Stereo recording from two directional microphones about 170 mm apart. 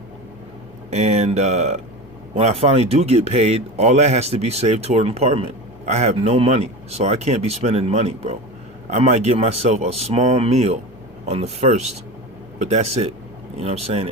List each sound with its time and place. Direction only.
0.9 s a man's voice: 40° right (ahead or behind)